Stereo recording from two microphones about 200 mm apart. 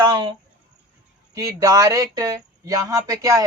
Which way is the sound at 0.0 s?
25° right (ahead or behind).